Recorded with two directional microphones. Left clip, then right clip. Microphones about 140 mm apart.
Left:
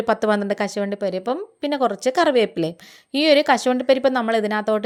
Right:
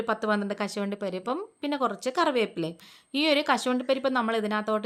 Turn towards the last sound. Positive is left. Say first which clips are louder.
# left 7 dB
turn(degrees=30)  # may be behind; listen again after turning